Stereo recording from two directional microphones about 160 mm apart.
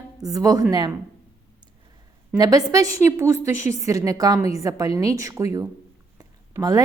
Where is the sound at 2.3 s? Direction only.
20° right (ahead or behind).